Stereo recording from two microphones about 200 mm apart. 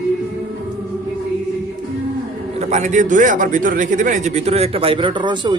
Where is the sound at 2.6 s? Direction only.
35° right (ahead or behind).